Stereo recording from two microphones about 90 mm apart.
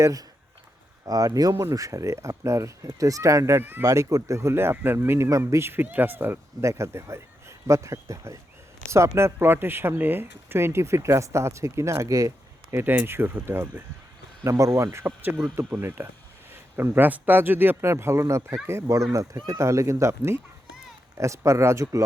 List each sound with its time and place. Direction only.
0.0 s speech: 40° right (ahead or behind)
3.6 s speech: 20° right (ahead or behind)
3.8 s speech: 40° right (ahead or behind)
12.7 s speech: 20° right (ahead or behind)
14.9 s speech: 20° right (ahead or behind)